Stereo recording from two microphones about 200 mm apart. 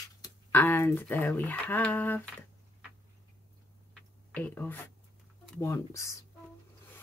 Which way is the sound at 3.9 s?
5° left (ahead or behind).